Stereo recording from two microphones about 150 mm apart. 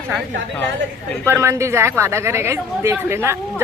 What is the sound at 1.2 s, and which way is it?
Speech, 15° right (ahead or behind).